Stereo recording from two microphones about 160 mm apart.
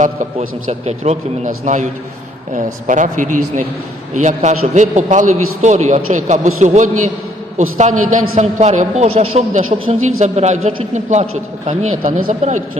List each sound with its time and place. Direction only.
0.0 s a man's voice: 50° right (ahead or behind)